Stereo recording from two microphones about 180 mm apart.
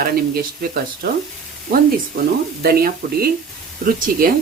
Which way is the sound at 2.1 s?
60° right (ahead or behind).